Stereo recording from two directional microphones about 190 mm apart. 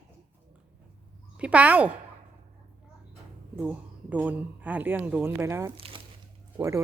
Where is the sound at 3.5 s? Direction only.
10° right (ahead or behind).